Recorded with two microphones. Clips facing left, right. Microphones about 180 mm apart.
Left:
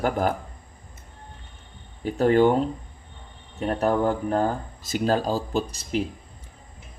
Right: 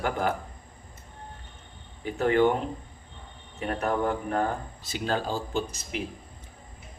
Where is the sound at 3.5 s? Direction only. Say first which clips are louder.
Left 5 dB; 35° left (ahead or behind).